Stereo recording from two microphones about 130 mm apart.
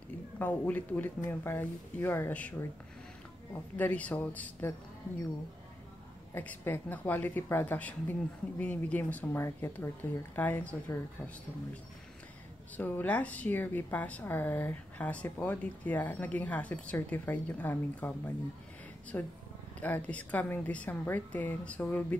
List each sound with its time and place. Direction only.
0.4 s a woman's voice: 15° left (ahead or behind)
3.7 s a woman's voice: 10° left (ahead or behind)
6.3 s a woman's voice: 15° left (ahead or behind)
12.7 s a woman's voice: 15° left (ahead or behind)